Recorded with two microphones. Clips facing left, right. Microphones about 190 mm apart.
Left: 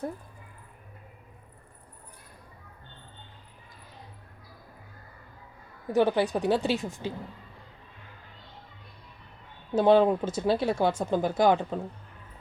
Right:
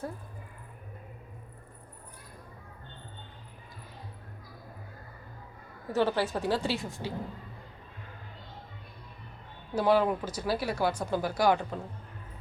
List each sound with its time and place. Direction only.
5.9 s a woman's voice: 15° left (ahead or behind)
9.7 s speech: 25° left (ahead or behind)